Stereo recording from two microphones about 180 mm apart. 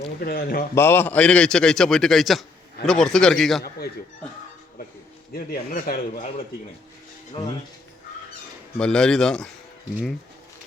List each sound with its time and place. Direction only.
0.0 s speech: 60° left (ahead or behind)
0.8 s a man's voice: 15° left (ahead or behind)
5.3 s speech: 55° left (ahead or behind)
8.8 s a man's voice: 5° left (ahead or behind)